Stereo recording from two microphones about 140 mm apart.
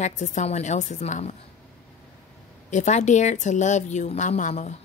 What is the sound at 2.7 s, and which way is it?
Speech, 55° left (ahead or behind).